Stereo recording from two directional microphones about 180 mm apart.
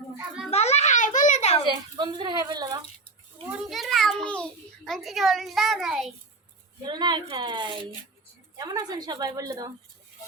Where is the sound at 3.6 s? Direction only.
Centre (ahead or behind).